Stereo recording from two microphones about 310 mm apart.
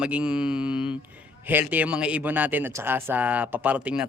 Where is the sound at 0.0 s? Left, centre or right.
Centre.